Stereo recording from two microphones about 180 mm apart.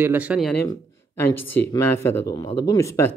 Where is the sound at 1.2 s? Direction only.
10° left (ahead or behind).